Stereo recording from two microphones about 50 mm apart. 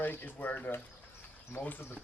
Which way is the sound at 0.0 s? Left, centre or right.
Left.